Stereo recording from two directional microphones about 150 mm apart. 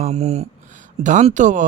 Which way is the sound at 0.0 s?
45° right (ahead or behind).